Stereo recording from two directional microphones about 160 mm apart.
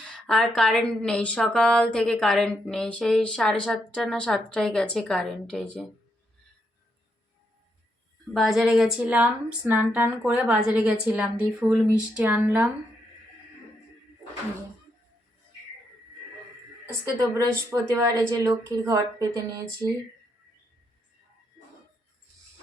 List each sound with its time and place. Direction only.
0.0 s speech: 5° left (ahead or behind)
8.3 s speech: centre (ahead or behind)
17.3 s a woman's voice: 20° right (ahead or behind)